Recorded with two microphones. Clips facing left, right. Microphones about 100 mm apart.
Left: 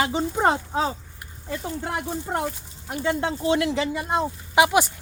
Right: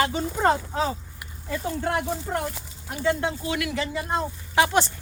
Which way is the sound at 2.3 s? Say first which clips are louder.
Left 1 dB; 20° left (ahead or behind).